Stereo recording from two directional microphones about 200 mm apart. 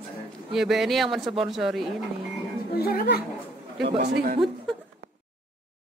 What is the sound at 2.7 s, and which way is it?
Speech, 50° left (ahead or behind).